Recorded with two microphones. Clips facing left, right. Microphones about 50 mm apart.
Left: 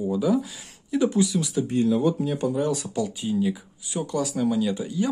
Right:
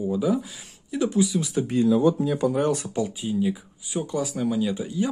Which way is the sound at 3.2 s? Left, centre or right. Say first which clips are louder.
Even; centre.